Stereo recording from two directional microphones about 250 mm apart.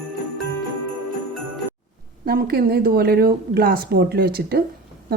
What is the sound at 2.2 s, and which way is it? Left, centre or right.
Speech, right.